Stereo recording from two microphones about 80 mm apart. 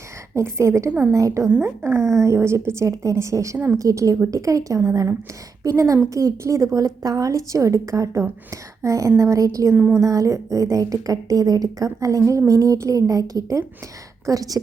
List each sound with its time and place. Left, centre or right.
0.3 s a woman's voice: right
1.5 s speech: centre
1.8 s a woman's voice: right